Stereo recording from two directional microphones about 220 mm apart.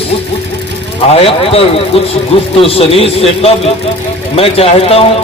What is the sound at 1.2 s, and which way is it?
A man's voice, 25° left (ahead or behind).